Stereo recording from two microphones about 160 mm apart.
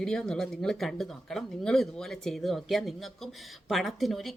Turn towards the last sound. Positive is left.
turn(degrees=0)  # may be behind; listen again after turning